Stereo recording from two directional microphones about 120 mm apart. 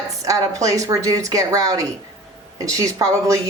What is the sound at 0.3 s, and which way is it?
A woman's voice, 30° right (ahead or behind).